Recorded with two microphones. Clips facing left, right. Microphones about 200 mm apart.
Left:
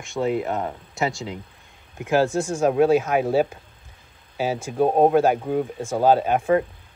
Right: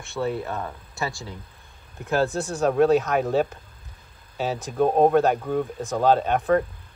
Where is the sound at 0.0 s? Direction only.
15° left (ahead or behind).